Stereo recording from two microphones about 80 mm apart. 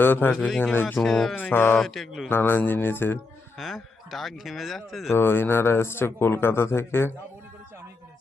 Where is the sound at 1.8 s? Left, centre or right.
Centre.